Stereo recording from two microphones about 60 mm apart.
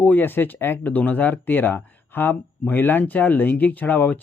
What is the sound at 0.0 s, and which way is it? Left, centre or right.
Speech, left.